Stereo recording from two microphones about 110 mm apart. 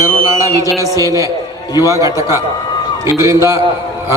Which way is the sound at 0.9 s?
30° right (ahead or behind).